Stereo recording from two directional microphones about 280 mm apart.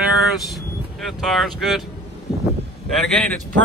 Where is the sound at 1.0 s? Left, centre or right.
Centre.